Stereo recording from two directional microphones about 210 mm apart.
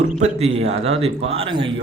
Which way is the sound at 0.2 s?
30° right (ahead or behind).